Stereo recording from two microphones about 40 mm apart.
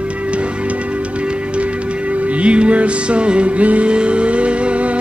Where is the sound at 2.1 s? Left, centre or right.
Right.